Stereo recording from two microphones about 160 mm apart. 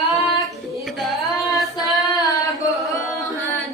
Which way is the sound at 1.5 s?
Centre (ahead or behind).